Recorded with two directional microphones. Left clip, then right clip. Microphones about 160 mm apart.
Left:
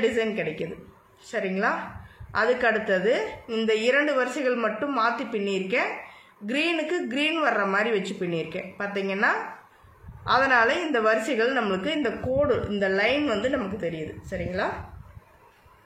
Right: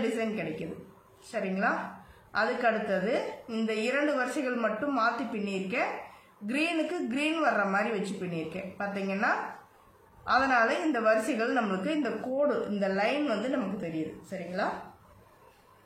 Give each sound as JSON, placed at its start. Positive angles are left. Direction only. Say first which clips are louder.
{"t": 0.0, "sound": "a woman's voice", "louder": "left 7 dB", "side_deg": 55}